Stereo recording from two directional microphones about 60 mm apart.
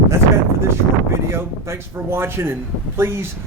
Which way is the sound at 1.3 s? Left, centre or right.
Right.